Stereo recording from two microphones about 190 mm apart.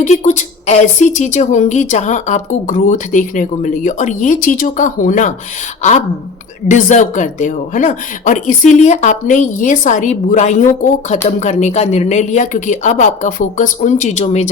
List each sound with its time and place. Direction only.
0.0 s a woman's voice: 40° left (ahead or behind)
6.7 s a woman's voice: 40° left (ahead or behind)